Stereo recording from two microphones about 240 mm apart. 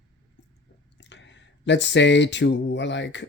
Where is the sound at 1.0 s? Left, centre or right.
Left.